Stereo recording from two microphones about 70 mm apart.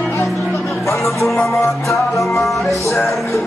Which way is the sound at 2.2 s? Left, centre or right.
Centre.